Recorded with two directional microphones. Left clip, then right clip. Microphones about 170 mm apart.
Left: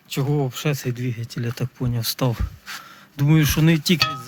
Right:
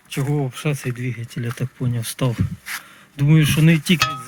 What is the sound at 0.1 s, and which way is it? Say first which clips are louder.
Speech: left 1 dB; 25° left (ahead or behind).